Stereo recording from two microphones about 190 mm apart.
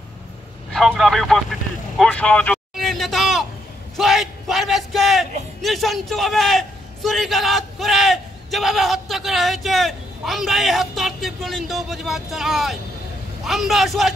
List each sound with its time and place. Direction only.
0.7 s a man's voice: centre (ahead or behind)